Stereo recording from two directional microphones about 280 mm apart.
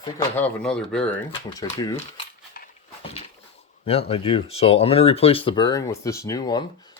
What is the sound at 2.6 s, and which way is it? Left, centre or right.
Dog, left.